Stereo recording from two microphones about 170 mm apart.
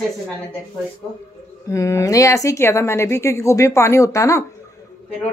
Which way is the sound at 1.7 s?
15° left (ahead or behind).